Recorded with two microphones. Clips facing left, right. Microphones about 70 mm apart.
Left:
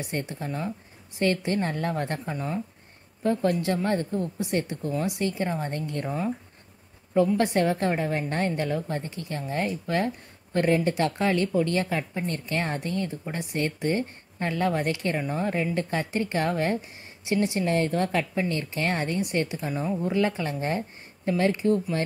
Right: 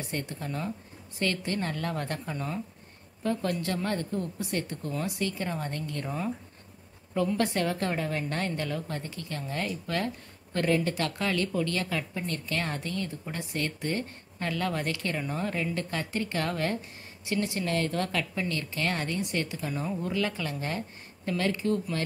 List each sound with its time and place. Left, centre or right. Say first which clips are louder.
0.0 s speech: left 3 dB; left
1.2 s speech: left 5 dB; left
7.2 s speech: left 5 dB; left
19.7 s speech: left 4 dB; centre
20.1 s speech: left 6 dB; left